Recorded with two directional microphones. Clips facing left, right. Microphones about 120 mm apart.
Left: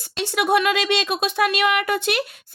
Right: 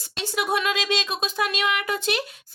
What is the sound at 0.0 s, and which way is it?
Speech, 70° left (ahead or behind).